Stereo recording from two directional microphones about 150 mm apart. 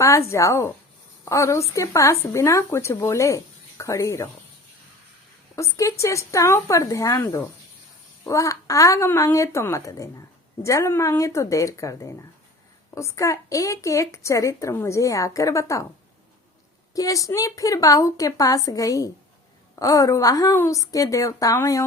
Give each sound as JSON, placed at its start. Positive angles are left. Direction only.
{"t": 0.0, "sound": "a woman's voice", "side_deg": 20}
{"t": 5.5, "sound": "a woman's voice", "side_deg": 20}
{"t": 8.2, "sound": "a woman's voice", "side_deg": 20}
{"t": 16.9, "sound": "a woman's voice", "side_deg": 20}